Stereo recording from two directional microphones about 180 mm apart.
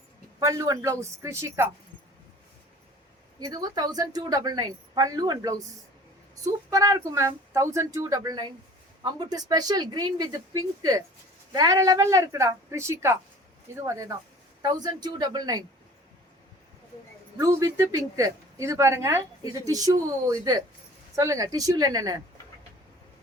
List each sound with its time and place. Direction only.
0.3 s speech: 20° right (ahead or behind)
3.4 s a woman's voice: 20° right (ahead or behind)
6.7 s a woman's voice: 20° right (ahead or behind)
17.3 s a woman's voice: 15° right (ahead or behind)